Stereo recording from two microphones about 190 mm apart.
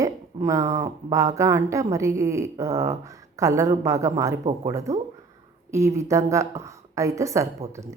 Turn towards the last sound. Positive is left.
turn(degrees=-15)  # may be behind; listen again after turning